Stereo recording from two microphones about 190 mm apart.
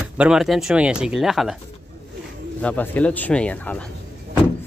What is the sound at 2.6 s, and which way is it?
Speech, 10° left (ahead or behind).